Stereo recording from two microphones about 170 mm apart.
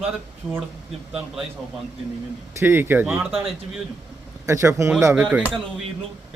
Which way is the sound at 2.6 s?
15° right (ahead or behind).